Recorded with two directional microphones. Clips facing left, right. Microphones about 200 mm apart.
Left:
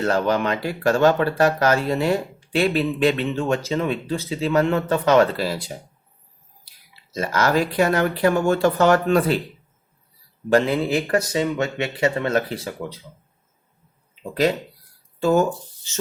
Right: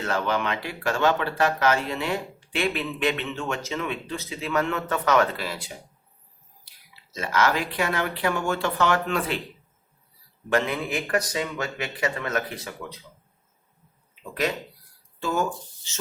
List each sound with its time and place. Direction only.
0.0 s speech: 40° left (ahead or behind)
7.1 s speech: 40° left (ahead or behind)
10.5 s speech: 35° left (ahead or behind)
15.2 s speech: 45° left (ahead or behind)